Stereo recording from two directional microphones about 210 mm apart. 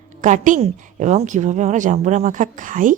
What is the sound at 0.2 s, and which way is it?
A woman's voice, 35° right (ahead or behind).